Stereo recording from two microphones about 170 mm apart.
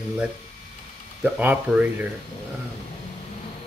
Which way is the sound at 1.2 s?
10° right (ahead or behind).